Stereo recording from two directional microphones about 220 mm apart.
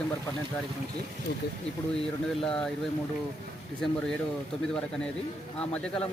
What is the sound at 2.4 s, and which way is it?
Speech, 5° left (ahead or behind).